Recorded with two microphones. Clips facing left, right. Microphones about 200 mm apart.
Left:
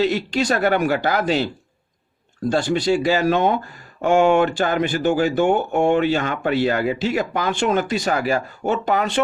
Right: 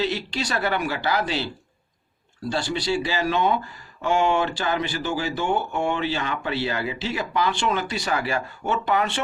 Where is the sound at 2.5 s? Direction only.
45° left (ahead or behind).